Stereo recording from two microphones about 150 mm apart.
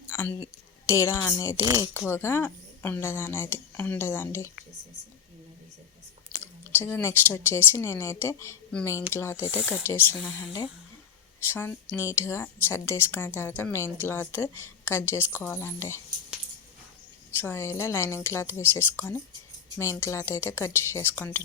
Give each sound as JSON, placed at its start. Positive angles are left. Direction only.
{"t": 0.9, "sound": "a woman's voice", "side_deg": 20}
{"t": 1.6, "sound": "speech", "side_deg": -20}
{"t": 1.9, "sound": "a woman's voice", "side_deg": 15}
{"t": 6.4, "sound": "a woman's voice", "side_deg": 15}
{"t": 11.4, "sound": "a woman's voice", "side_deg": 15}
{"t": 17.4, "sound": "a woman's voice", "side_deg": 15}